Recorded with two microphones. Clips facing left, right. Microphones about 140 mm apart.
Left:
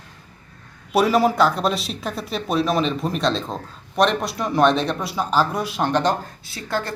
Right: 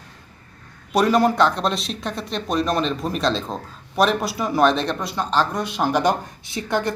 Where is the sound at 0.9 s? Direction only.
5° left (ahead or behind).